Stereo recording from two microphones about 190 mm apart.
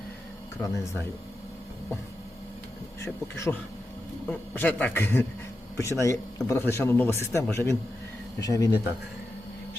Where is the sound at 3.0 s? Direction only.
15° left (ahead or behind).